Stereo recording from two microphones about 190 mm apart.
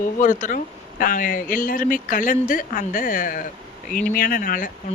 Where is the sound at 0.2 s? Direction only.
40° left (ahead or behind).